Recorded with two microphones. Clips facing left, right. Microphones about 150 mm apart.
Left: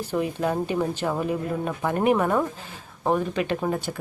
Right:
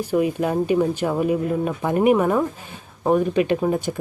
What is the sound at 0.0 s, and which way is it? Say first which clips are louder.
A woman's voice: right 5 dB; 15° right (ahead or behind).